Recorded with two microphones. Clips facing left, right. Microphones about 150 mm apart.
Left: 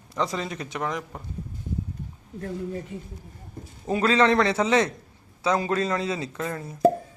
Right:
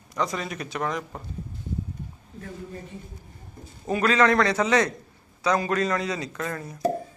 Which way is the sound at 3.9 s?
25° left (ahead or behind).